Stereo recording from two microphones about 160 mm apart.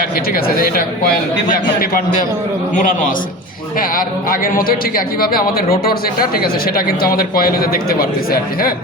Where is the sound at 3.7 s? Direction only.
60° left (ahead or behind).